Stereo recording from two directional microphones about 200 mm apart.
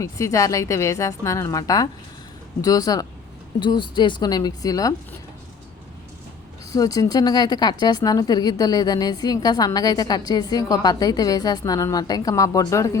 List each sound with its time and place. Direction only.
0.0 s a woman's voice: 15° left (ahead or behind)
6.7 s speech: 15° left (ahead or behind)